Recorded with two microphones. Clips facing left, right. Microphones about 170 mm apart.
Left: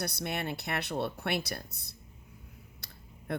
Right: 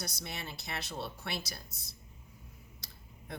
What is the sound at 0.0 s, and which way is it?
Speech, 60° left (ahead or behind).